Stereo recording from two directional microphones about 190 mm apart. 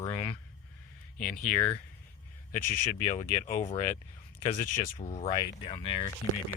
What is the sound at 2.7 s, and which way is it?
Speech, 35° left (ahead or behind).